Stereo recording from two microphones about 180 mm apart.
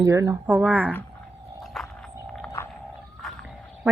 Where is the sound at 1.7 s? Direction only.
Centre (ahead or behind).